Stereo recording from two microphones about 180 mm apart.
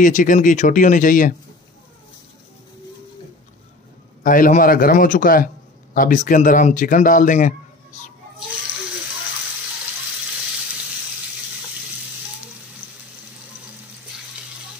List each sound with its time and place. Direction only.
0.0 s speech: 45° left (ahead or behind)
4.2 s speech: 45° left (ahead or behind)